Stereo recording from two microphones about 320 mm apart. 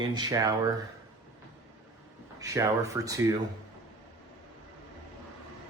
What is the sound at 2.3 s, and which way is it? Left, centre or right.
Speech, centre.